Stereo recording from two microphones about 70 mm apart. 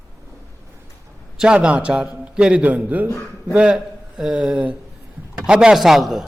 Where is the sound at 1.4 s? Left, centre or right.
Centre.